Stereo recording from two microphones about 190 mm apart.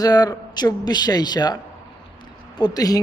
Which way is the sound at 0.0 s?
20° left (ahead or behind).